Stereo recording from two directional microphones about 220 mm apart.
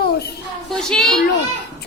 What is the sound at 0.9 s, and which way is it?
Speech, 5° left (ahead or behind).